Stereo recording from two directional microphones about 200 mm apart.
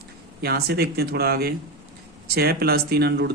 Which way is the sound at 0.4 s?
55° right (ahead or behind).